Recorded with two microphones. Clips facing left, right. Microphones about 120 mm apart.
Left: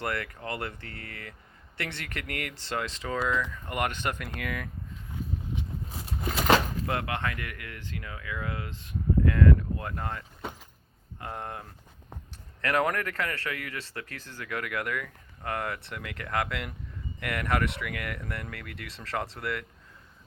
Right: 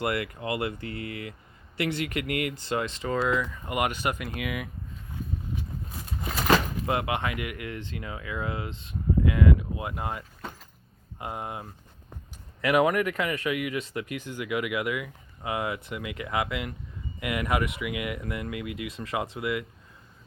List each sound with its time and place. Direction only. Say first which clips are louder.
0.0 s speech: right 4 dB; 10° right (ahead or behind)
6.7 s speech: right 3 dB; 15° right (ahead or behind)